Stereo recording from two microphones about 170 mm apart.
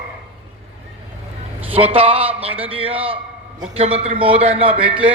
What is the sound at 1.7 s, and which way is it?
A man's voice, 35° right (ahead or behind).